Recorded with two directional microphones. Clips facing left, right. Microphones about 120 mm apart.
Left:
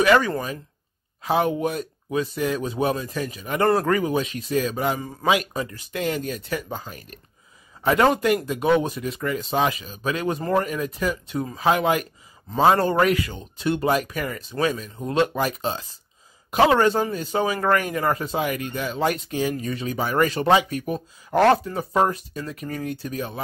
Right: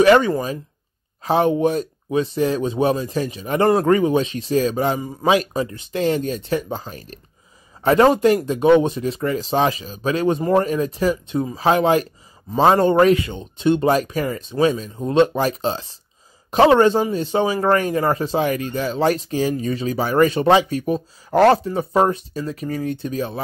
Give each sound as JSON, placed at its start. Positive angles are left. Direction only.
{"t": 0.0, "sound": "a man's voice", "side_deg": -30}